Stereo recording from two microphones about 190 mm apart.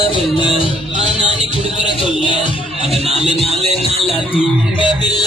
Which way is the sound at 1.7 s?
25° left (ahead or behind).